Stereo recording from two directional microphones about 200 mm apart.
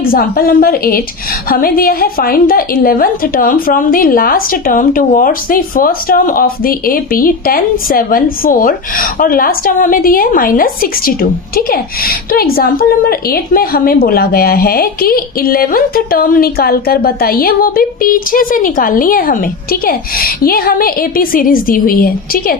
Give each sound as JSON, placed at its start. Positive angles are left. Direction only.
{"t": 0.0, "sound": "a woman's voice", "side_deg": 45}